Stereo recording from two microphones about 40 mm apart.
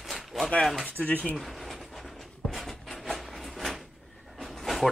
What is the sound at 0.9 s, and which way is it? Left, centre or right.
Speech, left.